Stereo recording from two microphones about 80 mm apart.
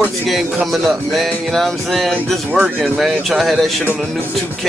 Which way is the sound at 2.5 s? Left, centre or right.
Centre.